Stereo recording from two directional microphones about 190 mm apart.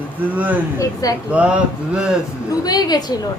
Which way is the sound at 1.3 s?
5° right (ahead or behind).